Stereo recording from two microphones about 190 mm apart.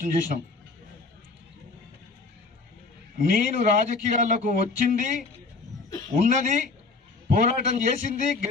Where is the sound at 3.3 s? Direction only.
45° right (ahead or behind).